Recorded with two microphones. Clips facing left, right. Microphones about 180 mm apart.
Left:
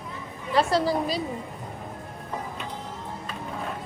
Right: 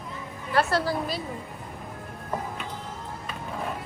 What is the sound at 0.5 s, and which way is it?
Speech, centre (ahead or behind).